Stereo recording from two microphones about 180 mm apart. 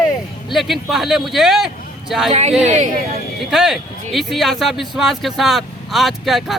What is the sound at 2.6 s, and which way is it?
Speech, 40° right (ahead or behind).